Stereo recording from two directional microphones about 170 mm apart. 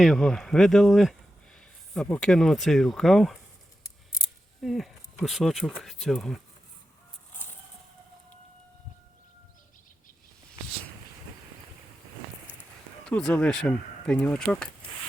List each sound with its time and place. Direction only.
0.0 s speech: centre (ahead or behind)
4.6 s speech: centre (ahead or behind)
13.1 s speech: 5° left (ahead or behind)